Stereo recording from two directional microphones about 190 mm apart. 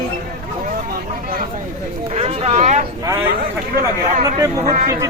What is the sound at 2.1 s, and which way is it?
Speech, 35° right (ahead or behind).